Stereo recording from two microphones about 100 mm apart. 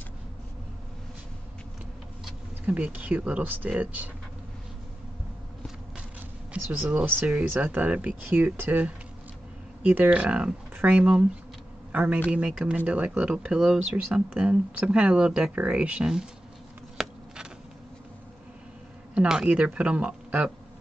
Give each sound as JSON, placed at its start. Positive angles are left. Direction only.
{"t": 2.2, "sound": "speech", "side_deg": -15}
{"t": 6.5, "sound": "a man's voice", "side_deg": -15}
{"t": 16.9, "sound": "a sound", "side_deg": -5}
{"t": 19.1, "sound": "speech", "side_deg": -10}